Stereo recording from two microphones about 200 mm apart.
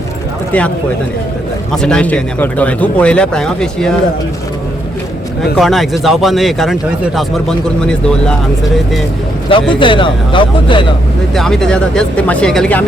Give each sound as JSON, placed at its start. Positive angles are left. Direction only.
{"t": 1.7, "sound": "speech", "side_deg": 5}
{"t": 5.5, "sound": "speech", "side_deg": 0}
{"t": 9.5, "sound": "speech", "side_deg": 25}
{"t": 11.3, "sound": "speech", "side_deg": 0}